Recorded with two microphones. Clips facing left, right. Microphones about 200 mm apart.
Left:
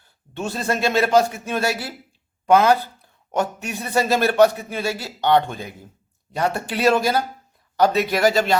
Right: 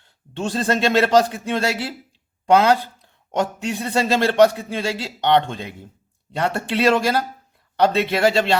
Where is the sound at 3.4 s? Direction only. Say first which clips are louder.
Right 2 dB; 30° right (ahead or behind).